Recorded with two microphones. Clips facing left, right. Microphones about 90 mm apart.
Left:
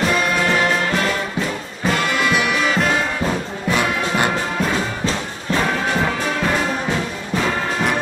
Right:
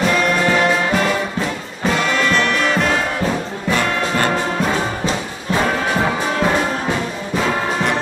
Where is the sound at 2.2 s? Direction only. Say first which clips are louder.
Right 1 dB; 10° left (ahead or behind).